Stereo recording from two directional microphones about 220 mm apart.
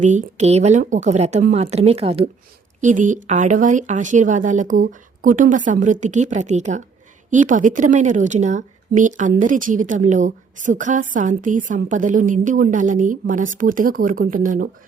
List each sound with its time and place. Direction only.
0.0 s a woman's voice: 35° right (ahead or behind)